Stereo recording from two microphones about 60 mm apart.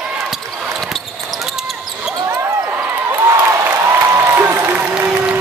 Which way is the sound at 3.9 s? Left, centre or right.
Right.